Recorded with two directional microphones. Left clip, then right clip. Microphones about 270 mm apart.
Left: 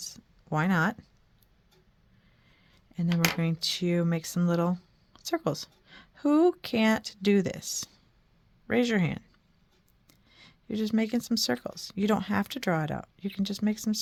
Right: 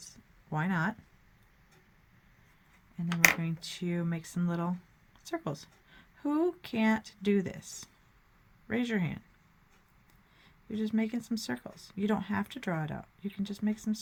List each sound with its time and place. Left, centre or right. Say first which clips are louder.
0.5 s speech: left 6 dB; left
3.4 s speech: left 9 dB; left
10.3 s speech: left 5 dB; left